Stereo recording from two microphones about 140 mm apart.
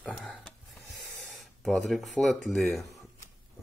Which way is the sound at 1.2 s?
Centre (ahead or behind).